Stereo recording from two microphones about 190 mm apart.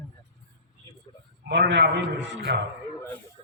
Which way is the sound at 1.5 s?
65° right (ahead or behind).